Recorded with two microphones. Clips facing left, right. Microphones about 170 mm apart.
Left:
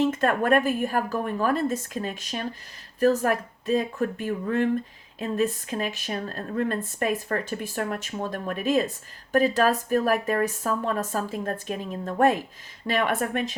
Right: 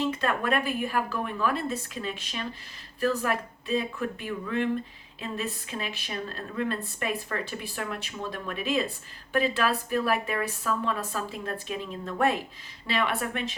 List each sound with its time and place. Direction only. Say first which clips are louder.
0.0 s speech: left 5 dB; 45° left (ahead or behind)